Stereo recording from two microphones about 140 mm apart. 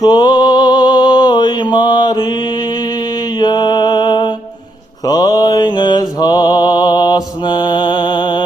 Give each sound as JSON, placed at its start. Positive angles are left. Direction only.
{"t": 0.0, "sound": "mantra", "side_deg": 30}
{"t": 3.3, "sound": "music", "side_deg": 30}
{"t": 5.0, "sound": "mantra", "side_deg": 25}